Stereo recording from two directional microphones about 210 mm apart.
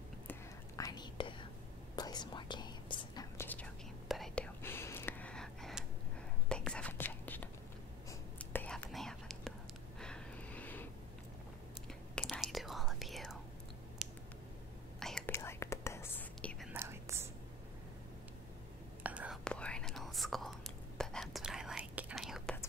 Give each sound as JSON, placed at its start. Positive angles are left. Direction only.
{"t": 0.3, "sound": "whispering", "side_deg": 15}
{"t": 4.6, "sound": "gasp", "side_deg": 10}
{"t": 6.5, "sound": "whispering", "side_deg": 5}
{"t": 9.9, "sound": "a sound", "side_deg": 5}
{"t": 12.2, "sound": "whispering", "side_deg": 0}
{"t": 14.0, "sound": "a sound", "side_deg": -5}
{"t": 15.0, "sound": "whispering", "side_deg": 0}
{"t": 16.7, "sound": "whispering", "side_deg": -10}
{"t": 19.0, "sound": "whispering", "side_deg": -5}